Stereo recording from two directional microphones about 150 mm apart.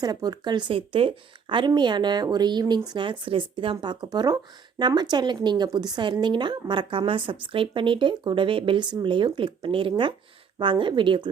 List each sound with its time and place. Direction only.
0.0 s a woman's voice: 25° right (ahead or behind)